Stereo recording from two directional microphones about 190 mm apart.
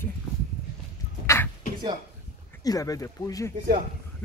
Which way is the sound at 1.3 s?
10° left (ahead or behind).